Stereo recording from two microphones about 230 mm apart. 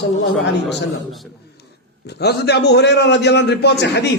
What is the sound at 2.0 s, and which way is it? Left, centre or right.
A man's voice, left.